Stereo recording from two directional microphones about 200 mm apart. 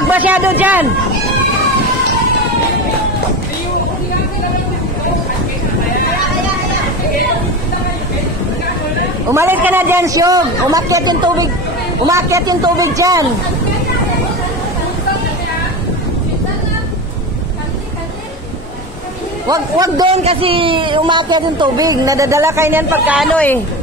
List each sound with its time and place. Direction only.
0.1 s a man's voice: 10° right (ahead or behind)
9.3 s a man's voice: 10° right (ahead or behind)
19.5 s a man's voice: 20° right (ahead or behind)
20.1 s a man's voice: 30° right (ahead or behind); by 23.3 s 5° right (ahead or behind)
23.3 s a woman's voice: 10° left (ahead or behind)